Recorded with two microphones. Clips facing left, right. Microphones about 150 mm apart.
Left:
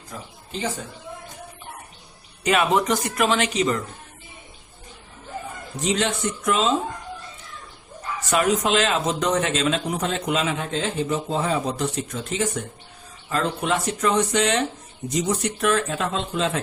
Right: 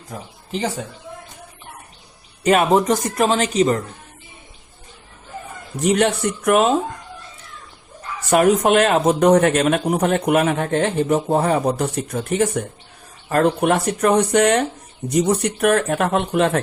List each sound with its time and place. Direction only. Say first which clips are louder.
2.4 s speech: right 5 dB; 45° right (ahead or behind)
5.8 s speech: right 6 dB; 60° right (ahead or behind)
8.3 s speech: right 6 dB; 55° right (ahead or behind)